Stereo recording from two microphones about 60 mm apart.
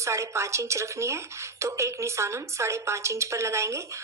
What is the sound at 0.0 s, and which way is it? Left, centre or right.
Speech, right.